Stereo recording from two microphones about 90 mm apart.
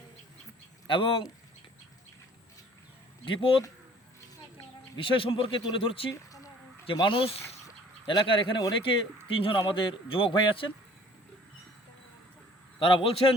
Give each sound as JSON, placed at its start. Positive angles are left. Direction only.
{"t": 0.9, "sound": "speech", "side_deg": 80}
{"t": 3.2, "sound": "a man's voice", "side_deg": 70}
{"t": 5.0, "sound": "speech", "side_deg": 80}
{"t": 6.9, "sound": "speech", "side_deg": 65}
{"t": 8.0, "sound": "speech", "side_deg": 60}
{"t": 8.7, "sound": "a man's voice", "side_deg": 70}
{"t": 12.8, "sound": "speech", "side_deg": 70}